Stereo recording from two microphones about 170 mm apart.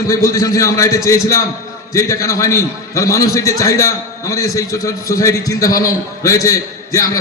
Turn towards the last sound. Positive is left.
turn(degrees=20)  # may be behind; listen again after turning